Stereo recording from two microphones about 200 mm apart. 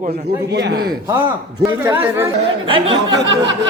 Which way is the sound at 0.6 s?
55° right (ahead or behind).